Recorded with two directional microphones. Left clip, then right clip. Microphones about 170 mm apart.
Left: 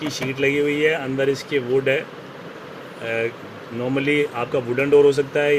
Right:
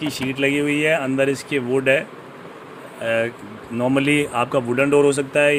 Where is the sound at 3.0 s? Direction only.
80° right.